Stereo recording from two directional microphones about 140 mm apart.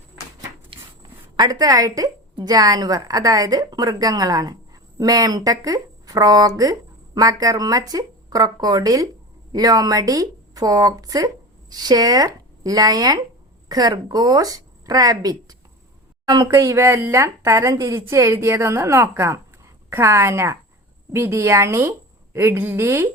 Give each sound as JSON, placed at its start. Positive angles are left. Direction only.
{"t": 1.4, "sound": "a woman's voice", "side_deg": -25}